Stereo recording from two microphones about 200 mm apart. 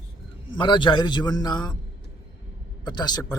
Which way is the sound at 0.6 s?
25° left (ahead or behind).